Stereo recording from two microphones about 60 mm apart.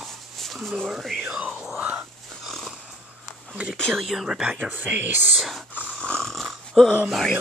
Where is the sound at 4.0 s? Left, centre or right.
Centre.